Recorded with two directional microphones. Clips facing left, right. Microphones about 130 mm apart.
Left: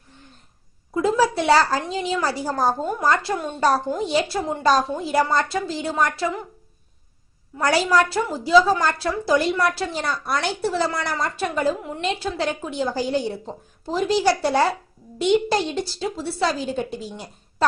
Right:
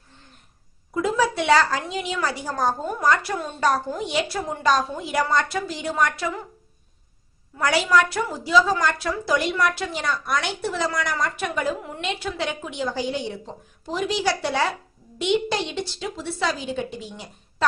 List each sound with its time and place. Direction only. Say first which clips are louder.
0.9 s a woman's voice: left 3 dB; 30° left (ahead or behind)
7.6 s a woman's voice: left 1 dB; 35° left (ahead or behind)